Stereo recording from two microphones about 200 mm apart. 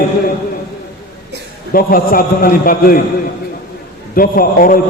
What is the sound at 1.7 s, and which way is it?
A man's voice, 45° left (ahead or behind).